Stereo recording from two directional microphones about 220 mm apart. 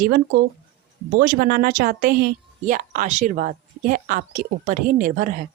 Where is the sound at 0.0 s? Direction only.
45° right (ahead or behind).